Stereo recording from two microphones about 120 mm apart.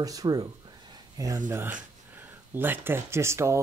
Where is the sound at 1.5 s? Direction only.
20° right (ahead or behind).